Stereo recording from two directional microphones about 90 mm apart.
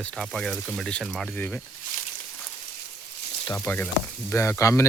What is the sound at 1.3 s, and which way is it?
Speech, 20° left (ahead or behind).